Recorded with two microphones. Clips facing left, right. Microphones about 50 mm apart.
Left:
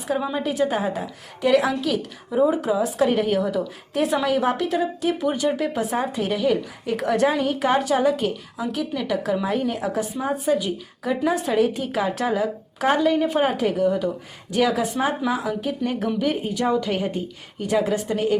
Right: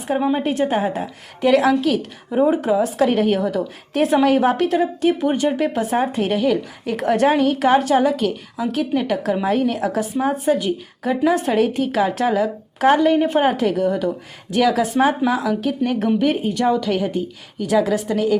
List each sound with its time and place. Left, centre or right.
0.1 s a woman's voice: right
0.3 s a woman's voice: right
9.5 s a woman's voice: right